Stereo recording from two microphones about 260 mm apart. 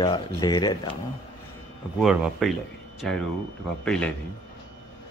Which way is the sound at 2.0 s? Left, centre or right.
Centre.